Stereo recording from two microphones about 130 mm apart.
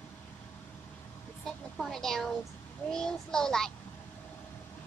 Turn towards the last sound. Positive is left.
turn(degrees=5)  # may be behind; listen again after turning